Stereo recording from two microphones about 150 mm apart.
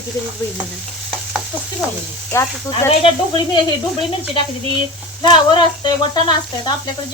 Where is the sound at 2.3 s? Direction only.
20° left (ahead or behind).